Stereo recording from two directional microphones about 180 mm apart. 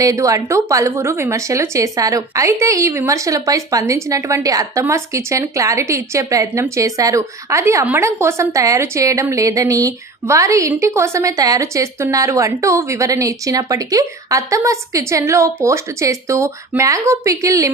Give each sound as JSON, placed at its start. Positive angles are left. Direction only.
{"t": 0.0, "sound": "a woman's voice", "side_deg": -15}